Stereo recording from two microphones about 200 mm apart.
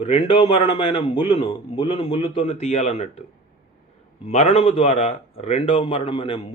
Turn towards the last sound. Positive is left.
turn(degrees=25)  # may be behind; listen again after turning